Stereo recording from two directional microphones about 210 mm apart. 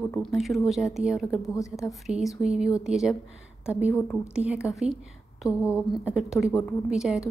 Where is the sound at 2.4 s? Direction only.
5° right (ahead or behind).